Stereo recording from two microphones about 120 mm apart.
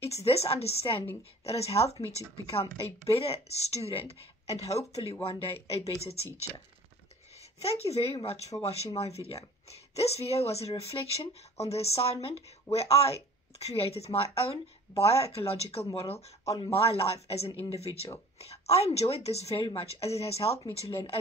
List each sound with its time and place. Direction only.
0.0 s speech: 55° left (ahead or behind)
7.3 s a woman's voice: 60° left (ahead or behind)